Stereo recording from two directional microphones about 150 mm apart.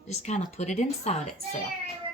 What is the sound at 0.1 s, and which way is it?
A woman's voice, 50° left (ahead or behind).